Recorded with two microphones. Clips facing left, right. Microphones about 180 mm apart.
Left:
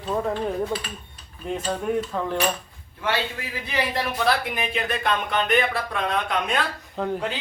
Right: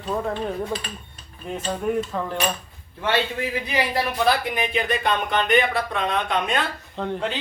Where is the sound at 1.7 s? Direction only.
Centre (ahead or behind).